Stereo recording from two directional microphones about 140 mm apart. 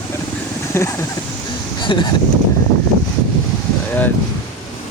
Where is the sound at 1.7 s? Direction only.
35° left (ahead or behind).